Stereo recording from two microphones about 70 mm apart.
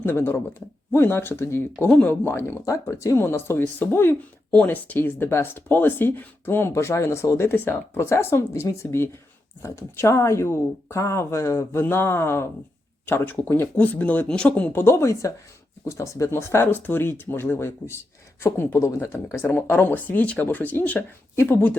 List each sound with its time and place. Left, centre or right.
0.0 s speech: left
1.9 s speech: centre
2.2 s speech: left
3.2 s speech: left
7.9 s speech: left
13.7 s speech: left
14.8 s speech: left
19.5 s speech: left